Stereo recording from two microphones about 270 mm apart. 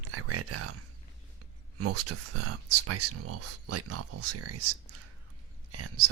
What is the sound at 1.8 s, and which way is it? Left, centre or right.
Speech, right.